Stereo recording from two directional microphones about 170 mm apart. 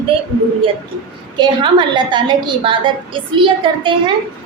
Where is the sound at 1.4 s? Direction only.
25° right (ahead or behind).